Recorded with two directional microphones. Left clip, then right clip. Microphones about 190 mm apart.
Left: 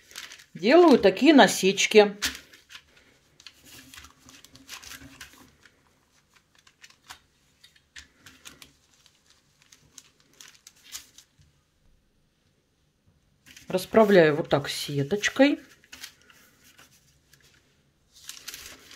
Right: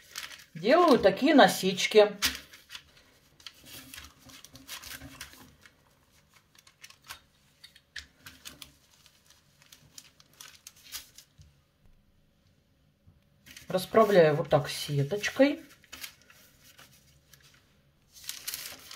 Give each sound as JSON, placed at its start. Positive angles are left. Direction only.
{"t": 0.6, "sound": "speech", "side_deg": 45}
{"t": 13.7, "sound": "speech", "side_deg": 40}